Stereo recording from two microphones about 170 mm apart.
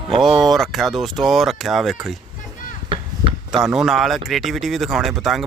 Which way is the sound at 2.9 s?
30° right (ahead or behind).